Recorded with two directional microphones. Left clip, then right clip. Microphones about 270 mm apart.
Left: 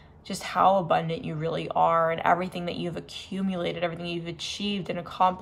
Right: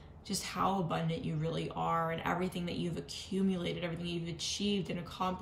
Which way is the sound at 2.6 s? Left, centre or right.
Left.